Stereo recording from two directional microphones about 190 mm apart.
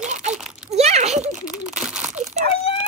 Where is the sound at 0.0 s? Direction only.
40° right (ahead or behind).